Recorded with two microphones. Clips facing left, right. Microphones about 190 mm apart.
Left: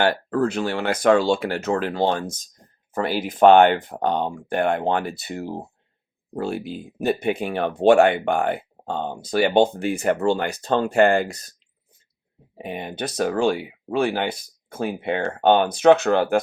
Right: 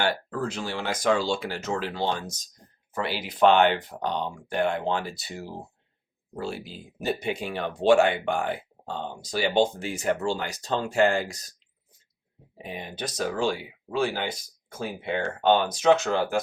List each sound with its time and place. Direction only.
0.0 s speech: 60° left (ahead or behind)
12.5 s speech: 60° left (ahead or behind)